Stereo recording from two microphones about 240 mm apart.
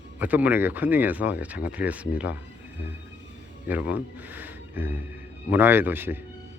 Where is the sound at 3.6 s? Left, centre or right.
Centre.